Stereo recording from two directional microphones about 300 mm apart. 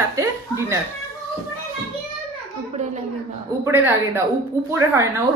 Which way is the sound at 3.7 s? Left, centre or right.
Centre.